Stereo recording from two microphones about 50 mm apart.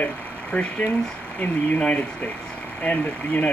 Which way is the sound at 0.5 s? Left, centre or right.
Left.